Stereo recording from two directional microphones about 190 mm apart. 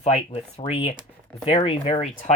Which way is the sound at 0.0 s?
35° left (ahead or behind).